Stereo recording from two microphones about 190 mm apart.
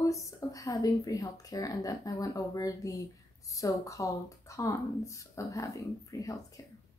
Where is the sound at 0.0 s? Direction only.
15° left (ahead or behind).